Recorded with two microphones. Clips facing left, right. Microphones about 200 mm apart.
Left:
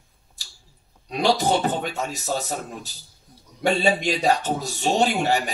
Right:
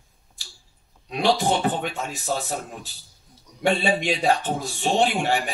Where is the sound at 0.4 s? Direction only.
40° left (ahead or behind).